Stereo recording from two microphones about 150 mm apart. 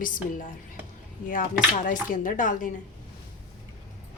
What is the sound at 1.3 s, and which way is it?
A woman's voice, 65° left (ahead or behind).